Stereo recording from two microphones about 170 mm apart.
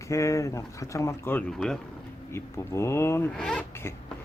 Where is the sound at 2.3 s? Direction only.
15° left (ahead or behind).